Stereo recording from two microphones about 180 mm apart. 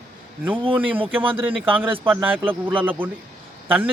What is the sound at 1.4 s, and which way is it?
A man's voice, 10° right (ahead or behind).